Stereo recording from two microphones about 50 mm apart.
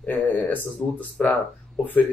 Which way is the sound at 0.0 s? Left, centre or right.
Left.